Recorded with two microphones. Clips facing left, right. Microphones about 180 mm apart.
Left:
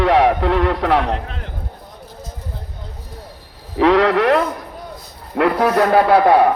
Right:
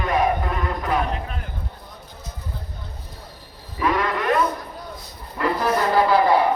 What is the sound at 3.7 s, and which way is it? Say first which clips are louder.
A man's voice: left 9 dB; 80° left.